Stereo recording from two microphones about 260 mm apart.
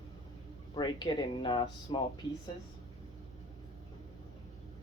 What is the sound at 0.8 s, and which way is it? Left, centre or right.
Speech, centre.